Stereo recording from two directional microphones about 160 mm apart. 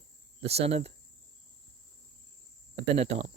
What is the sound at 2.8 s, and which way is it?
Speech, 45° right (ahead or behind).